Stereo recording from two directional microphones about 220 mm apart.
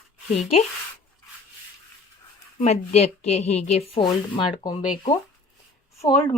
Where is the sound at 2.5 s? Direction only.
30° left (ahead or behind).